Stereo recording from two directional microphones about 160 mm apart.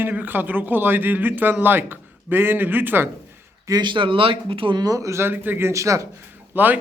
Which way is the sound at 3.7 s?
25° right (ahead or behind).